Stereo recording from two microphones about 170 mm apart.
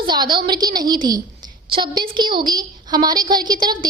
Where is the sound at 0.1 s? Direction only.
25° right (ahead or behind).